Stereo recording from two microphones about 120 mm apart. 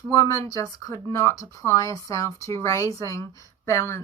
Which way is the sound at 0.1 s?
30° left (ahead or behind).